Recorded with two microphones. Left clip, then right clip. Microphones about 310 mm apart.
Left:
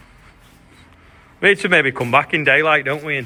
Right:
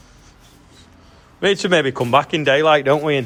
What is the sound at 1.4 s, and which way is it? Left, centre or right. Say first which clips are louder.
A man's voice: left 2 dB; centre.